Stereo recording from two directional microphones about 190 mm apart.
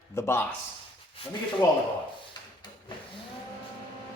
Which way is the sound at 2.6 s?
25° left (ahead or behind).